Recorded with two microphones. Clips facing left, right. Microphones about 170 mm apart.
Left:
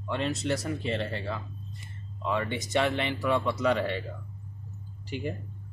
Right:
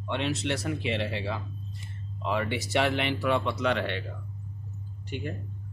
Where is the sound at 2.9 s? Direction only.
90° right.